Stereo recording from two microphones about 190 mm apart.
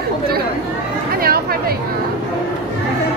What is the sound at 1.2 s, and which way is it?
Chatter, 55° right (ahead or behind).